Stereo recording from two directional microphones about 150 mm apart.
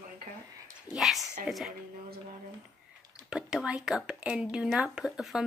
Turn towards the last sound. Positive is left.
turn(degrees=0)  # may be behind; listen again after turning